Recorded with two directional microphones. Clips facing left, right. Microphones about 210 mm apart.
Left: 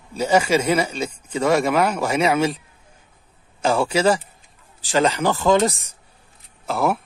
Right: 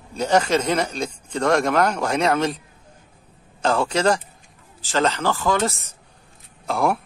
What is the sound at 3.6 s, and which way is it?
Speech, 10° left (ahead or behind).